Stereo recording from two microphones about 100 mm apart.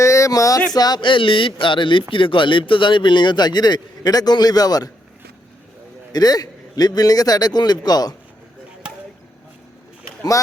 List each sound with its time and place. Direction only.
0.0 s a sound: 30° left (ahead or behind)
0.7 s speech: 40° left (ahead or behind)
6.1 s a man's voice: 40° left (ahead or behind)